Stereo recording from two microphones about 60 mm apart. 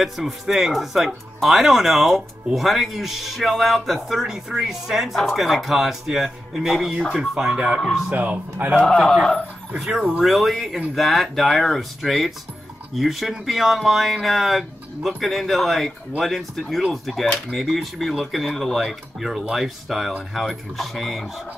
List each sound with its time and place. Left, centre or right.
0.0 s speech: centre
8.1 s speech: right
8.7 s speech: centre
9.8 s speech: centre